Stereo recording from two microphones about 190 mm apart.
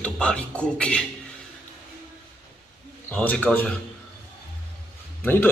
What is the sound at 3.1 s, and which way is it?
Speech, 10° left (ahead or behind).